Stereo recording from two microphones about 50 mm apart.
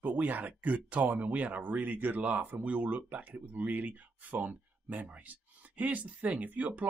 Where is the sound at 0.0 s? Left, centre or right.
Right.